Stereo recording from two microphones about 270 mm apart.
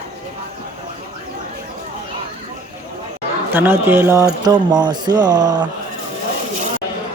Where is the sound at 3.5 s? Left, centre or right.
Centre.